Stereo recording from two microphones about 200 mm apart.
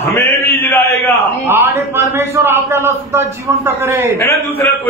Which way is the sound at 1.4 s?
10° right (ahead or behind).